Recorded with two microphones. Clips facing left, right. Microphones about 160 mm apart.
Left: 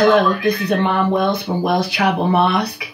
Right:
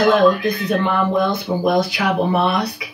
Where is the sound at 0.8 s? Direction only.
65° left (ahead or behind).